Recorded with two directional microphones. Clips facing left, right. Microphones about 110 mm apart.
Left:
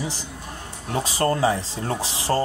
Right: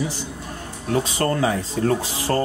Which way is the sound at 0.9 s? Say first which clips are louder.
Right 1 dB; 30° left (ahead or behind).